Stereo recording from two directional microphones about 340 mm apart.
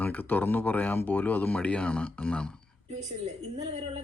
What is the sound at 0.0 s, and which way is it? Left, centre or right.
Speech, centre.